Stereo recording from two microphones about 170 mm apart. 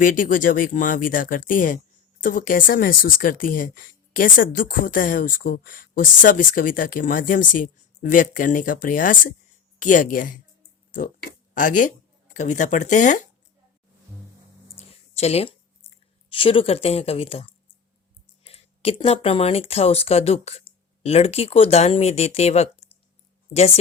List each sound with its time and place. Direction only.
0.0 s speech: 50° left (ahead or behind)
11.5 s speech: 50° left (ahead or behind)
14.8 s a sound: 35° left (ahead or behind)
18.4 s speech: 35° left (ahead or behind)